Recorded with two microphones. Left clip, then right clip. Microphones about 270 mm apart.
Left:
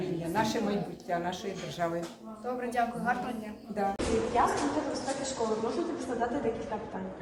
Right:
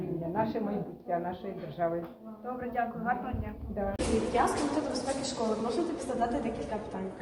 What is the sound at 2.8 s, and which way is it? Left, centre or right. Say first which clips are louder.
Speech: left 2 dB; centre.